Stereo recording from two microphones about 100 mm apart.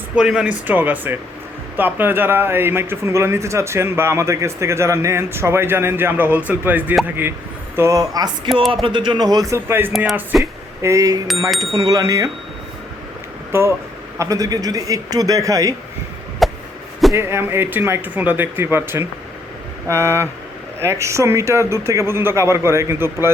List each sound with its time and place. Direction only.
0.2 s a man's voice: 10° right (ahead or behind)
7.8 s a man's voice: 35° right (ahead or behind)
8.7 s speech: 60° right (ahead or behind); by 9.6 s 40° right (ahead or behind)
9.6 s a man's voice: 20° right (ahead or behind)
10.3 s speech: 5° right (ahead or behind)
10.8 s a man's voice: 35° right (ahead or behind)
11.6 s speech: 60° right (ahead or behind)
11.9 s a man's voice: 35° right (ahead or behind)
13.5 s a man's voice: 30° right (ahead or behind)
16.4 s chop: centre (ahead or behind)
17.1 s a man's voice: 25° right (ahead or behind)